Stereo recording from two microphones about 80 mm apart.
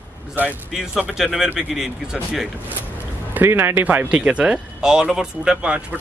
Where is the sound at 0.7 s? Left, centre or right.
Centre.